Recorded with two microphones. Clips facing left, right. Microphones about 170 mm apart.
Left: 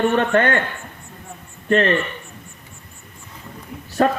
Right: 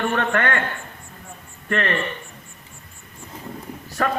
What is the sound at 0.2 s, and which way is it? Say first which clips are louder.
Speech: left 5 dB; 30° left (ahead or behind).